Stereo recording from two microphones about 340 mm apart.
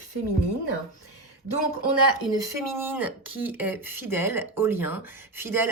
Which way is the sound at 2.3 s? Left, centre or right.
Centre.